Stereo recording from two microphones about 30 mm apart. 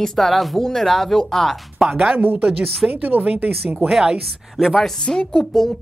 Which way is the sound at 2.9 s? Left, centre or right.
Right.